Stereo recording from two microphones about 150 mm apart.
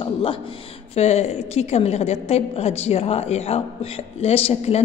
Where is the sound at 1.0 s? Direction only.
45° left (ahead or behind).